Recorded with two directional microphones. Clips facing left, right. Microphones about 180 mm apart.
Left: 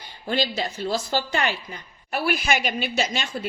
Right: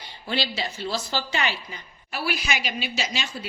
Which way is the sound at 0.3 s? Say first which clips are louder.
Left 3 dB; 45° left (ahead or behind).